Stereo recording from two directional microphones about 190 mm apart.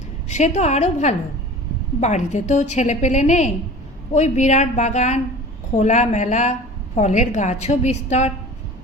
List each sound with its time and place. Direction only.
0.3 s a woman's voice: 35° left (ahead or behind)